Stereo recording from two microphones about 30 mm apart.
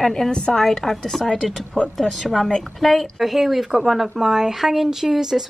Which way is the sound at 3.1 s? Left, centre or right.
Centre.